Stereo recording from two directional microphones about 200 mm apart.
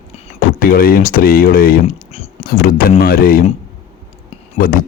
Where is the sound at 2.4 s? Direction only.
45° left (ahead or behind).